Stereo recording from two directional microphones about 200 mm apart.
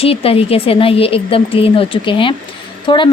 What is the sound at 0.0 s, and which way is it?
Speech, 30° left (ahead or behind).